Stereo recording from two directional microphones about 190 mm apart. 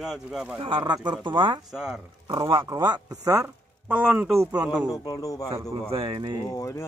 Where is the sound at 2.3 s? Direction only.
25° right (ahead or behind); by 4.8 s 10° right (ahead or behind).